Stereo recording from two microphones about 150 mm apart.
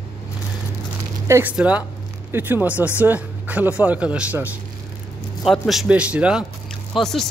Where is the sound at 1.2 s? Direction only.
20° right (ahead or behind).